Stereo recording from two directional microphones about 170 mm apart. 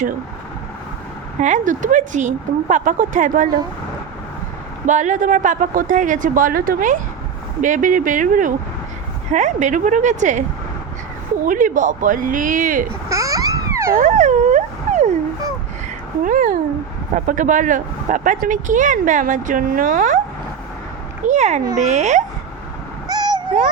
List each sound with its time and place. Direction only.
1.4 s speech: 45° right (ahead or behind)
4.9 s speech: 45° right (ahead or behind)
11.4 s speech: 50° right (ahead or behind)
13.1 s a sound: 20° right (ahead or behind)
13.9 s dog: 50° right (ahead or behind)
16.2 s speech: 50° right (ahead or behind)
21.2 s speech: 45° right (ahead or behind)
23.0 s a sound: 25° right (ahead or behind)